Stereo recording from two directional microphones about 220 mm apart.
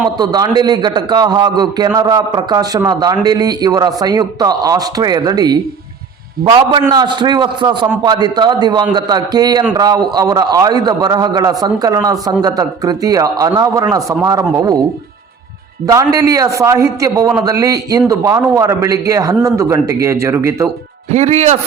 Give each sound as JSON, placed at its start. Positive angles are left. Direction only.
{"t": 0.2, "sound": "a man's voice", "side_deg": -20}
{"t": 16.1, "sound": "a man's voice", "side_deg": -15}
{"t": 21.1, "sound": "speech", "side_deg": -30}